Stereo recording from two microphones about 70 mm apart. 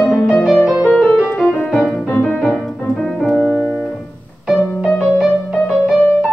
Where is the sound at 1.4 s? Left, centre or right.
Centre.